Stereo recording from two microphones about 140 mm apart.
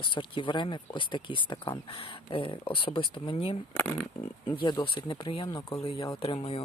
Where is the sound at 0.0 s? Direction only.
35° left (ahead or behind).